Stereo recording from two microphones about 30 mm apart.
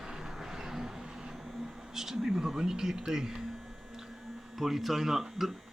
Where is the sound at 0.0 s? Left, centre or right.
Centre.